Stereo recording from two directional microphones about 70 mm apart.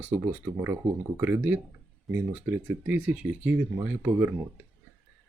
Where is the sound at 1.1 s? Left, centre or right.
Right.